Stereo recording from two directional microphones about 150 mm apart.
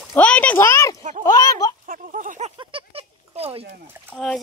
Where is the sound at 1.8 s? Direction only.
60° right (ahead or behind).